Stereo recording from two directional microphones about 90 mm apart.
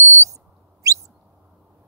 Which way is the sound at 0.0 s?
35° right (ahead or behind).